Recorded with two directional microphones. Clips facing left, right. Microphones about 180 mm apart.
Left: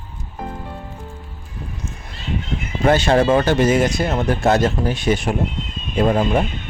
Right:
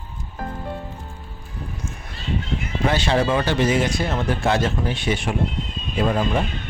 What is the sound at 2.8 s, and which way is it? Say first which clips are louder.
Speech: left 6 dB; 45° left (ahead or behind).